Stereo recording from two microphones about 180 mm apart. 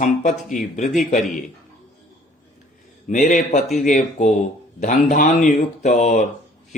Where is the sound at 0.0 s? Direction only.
45° left (ahead or behind).